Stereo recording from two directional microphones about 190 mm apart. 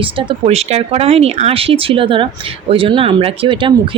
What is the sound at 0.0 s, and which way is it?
Speech, 30° right (ahead or behind).